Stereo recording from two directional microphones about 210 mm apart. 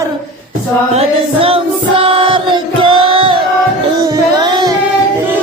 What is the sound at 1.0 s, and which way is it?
Music, 25° right (ahead or behind).